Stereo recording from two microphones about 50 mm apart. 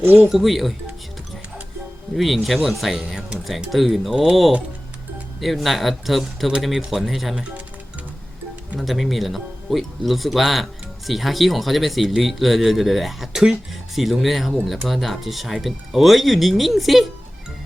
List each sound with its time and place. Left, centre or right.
0.0 s speech: right
0.3 s speech: centre
2.1 s speech: centre
5.4 s speech: centre
8.8 s speech: centre